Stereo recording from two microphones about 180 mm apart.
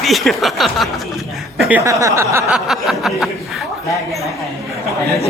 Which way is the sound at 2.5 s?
Centre (ahead or behind).